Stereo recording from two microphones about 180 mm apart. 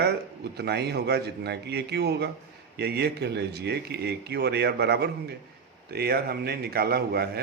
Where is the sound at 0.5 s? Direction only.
65° right (ahead or behind).